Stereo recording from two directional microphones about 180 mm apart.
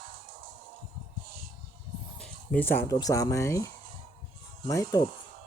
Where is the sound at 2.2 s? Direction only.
10° left (ahead or behind).